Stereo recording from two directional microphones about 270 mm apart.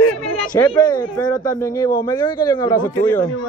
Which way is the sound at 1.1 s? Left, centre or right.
Centre.